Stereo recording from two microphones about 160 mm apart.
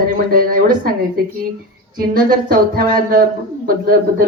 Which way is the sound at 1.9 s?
65° right (ahead or behind).